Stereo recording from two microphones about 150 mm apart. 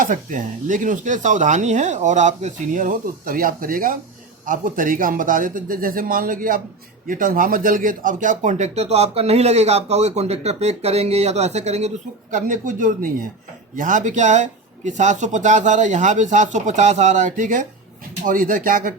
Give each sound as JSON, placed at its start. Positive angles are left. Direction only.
{"t": 0.0, "sound": "speech", "side_deg": -60}
{"t": 12.3, "sound": "speech", "side_deg": -60}